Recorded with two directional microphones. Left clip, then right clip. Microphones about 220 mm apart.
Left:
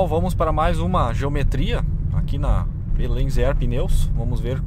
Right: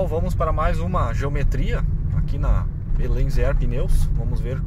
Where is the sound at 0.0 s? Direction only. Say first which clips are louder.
Left 3 dB; 25° left (ahead or behind).